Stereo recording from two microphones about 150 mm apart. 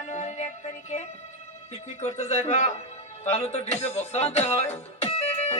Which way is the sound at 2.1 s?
50° left (ahead or behind).